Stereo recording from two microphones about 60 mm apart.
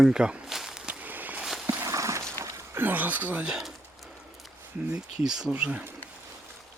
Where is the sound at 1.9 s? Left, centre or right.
Right.